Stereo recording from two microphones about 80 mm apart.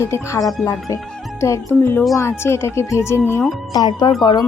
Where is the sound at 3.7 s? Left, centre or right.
Left.